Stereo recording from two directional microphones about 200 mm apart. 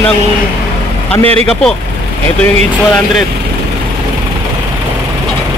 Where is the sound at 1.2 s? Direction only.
30° right (ahead or behind).